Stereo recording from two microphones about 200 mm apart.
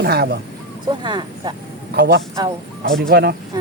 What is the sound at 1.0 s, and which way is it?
Speech, 25° right (ahead or behind).